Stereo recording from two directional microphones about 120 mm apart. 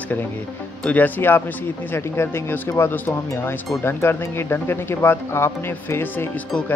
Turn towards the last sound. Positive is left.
turn(degrees=20)  # may be behind; listen again after turning